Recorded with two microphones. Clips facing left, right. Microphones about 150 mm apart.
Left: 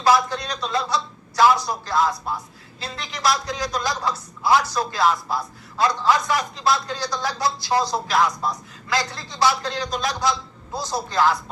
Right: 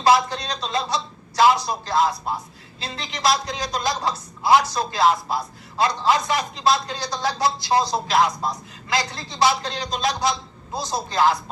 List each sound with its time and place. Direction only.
0.0 s speech: 25° right (ahead or behind)